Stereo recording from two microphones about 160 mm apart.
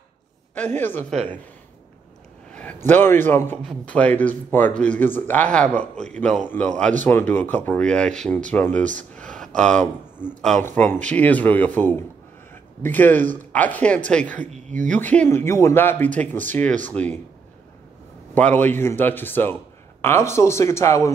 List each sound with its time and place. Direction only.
0.7 s a man's voice: 15° left (ahead or behind)
2.5 s a man's voice: 10° left (ahead or behind)
14.5 s speech: 50° right (ahead or behind)
14.9 s a man's voice: 10° left (ahead or behind)
18.3 s a man's voice: 10° left (ahead or behind)